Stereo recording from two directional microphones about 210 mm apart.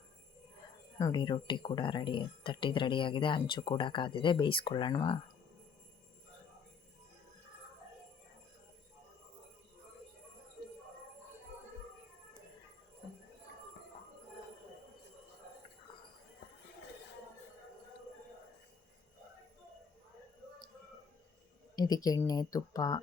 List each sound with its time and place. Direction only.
0.9 s speech: 20° left (ahead or behind)
21.8 s speech: 20° left (ahead or behind)